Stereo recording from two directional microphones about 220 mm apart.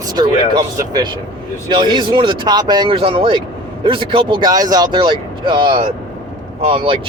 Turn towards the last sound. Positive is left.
turn(degrees=-25)  # may be behind; listen again after turning